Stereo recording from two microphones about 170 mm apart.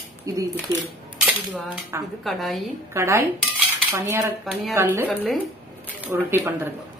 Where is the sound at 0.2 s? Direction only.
20° right (ahead or behind).